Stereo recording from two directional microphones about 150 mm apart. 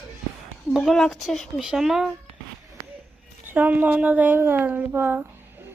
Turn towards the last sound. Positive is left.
turn(degrees=-15)  # may be behind; listen again after turning